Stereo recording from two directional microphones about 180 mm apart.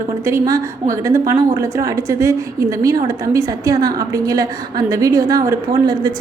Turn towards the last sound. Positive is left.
turn(degrees=-20)  # may be behind; listen again after turning